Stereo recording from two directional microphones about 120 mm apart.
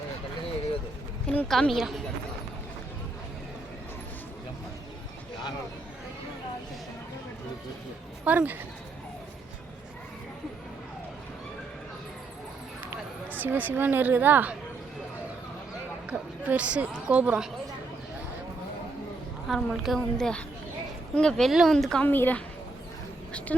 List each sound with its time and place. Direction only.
1.5 s speech: centre (ahead or behind)
8.2 s speech: 15° right (ahead or behind)
12.8 s speech: 15° right (ahead or behind)
16.0 s a woman's voice: 10° right (ahead or behind)
19.5 s a woman's voice: centre (ahead or behind)
22.0 s a woman's voice: 15° left (ahead or behind)
23.5 s a woman's voice: 10° left (ahead or behind)